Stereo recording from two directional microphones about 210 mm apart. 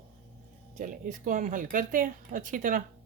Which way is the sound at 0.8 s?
40° right (ahead or behind).